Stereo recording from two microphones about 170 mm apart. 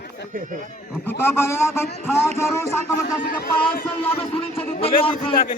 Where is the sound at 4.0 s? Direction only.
35° left (ahead or behind).